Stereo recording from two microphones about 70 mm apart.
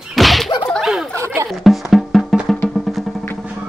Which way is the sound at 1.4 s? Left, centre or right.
Centre.